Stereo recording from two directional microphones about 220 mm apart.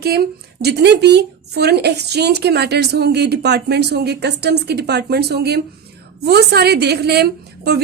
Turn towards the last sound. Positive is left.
turn(degrees=-45)  # may be behind; listen again after turning